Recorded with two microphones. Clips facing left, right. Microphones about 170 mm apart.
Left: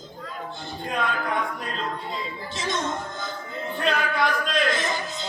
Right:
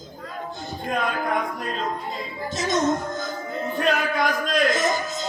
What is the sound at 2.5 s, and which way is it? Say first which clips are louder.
Music: right 6 dB; 45° right (ahead or behind).